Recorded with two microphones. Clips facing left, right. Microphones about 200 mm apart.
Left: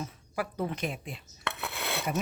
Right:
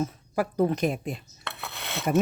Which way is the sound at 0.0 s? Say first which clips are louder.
Right 7 dB; 40° right (ahead or behind).